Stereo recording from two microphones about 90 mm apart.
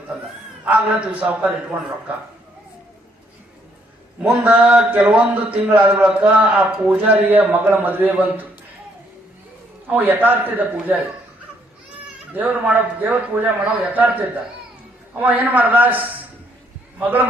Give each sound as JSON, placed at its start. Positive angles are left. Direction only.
{"t": 0.6, "sound": "a man's voice", "side_deg": -15}
{"t": 4.2, "sound": "a man's voice", "side_deg": -15}
{"t": 9.8, "sound": "a man's voice", "side_deg": -20}
{"t": 12.3, "sound": "a man's voice", "side_deg": -20}